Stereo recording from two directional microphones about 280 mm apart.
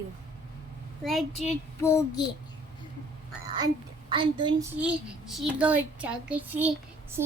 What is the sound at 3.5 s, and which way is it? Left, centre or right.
A woman's voice, centre.